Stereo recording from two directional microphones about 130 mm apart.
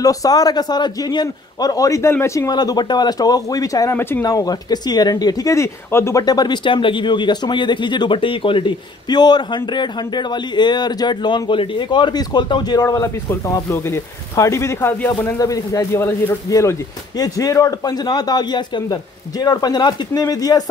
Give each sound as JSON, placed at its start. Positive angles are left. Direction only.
{"t": 0.0, "sound": "a man's voice", "side_deg": 30}
{"t": 3.9, "sound": "speech", "side_deg": 15}
{"t": 4.2, "sound": "speech", "side_deg": 30}
{"t": 15.3, "sound": "a man's voice", "side_deg": 25}